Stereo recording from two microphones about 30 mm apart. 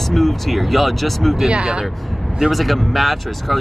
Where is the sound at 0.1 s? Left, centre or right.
Centre.